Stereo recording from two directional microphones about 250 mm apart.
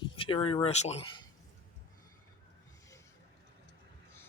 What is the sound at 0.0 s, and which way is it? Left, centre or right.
Speech, left.